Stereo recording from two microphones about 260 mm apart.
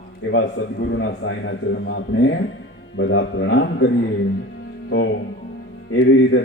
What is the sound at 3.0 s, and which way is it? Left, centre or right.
Speech, left.